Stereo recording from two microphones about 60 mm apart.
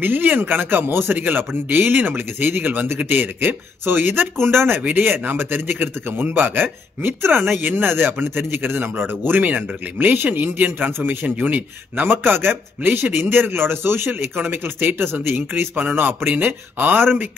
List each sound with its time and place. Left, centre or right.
0.0 s a man's voice: right